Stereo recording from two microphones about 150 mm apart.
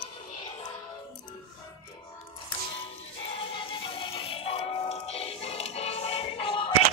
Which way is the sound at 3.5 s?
35° left (ahead or behind).